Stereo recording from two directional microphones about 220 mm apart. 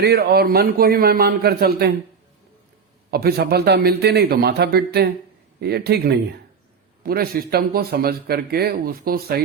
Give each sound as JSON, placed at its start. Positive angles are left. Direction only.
{"t": 0.0, "sound": "speech", "side_deg": -45}
{"t": 3.1, "sound": "speech", "side_deg": -45}